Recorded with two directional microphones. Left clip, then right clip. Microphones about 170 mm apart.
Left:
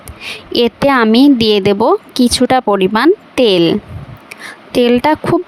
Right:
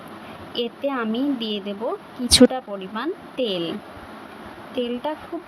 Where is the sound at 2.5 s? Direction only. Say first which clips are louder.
Left 18 dB; 90° left; by 5.1 s 75° left (ahead or behind).